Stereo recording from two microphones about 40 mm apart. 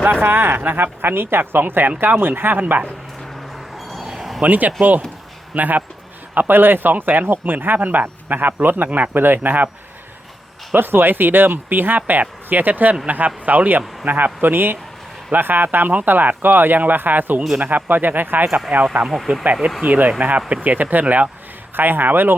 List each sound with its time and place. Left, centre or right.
0.0 s speech: right
4.0 s a sound: centre
4.4 s speech: right
10.8 s speech: right
14.4 s speech: right
19.0 s speech: centre
19.8 s speech: right
21.8 s speech: right